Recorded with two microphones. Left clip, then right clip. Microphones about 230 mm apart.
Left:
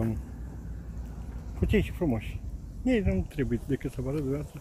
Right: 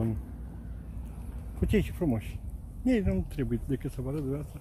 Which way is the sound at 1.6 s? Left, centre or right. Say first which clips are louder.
Left 1 dB; right.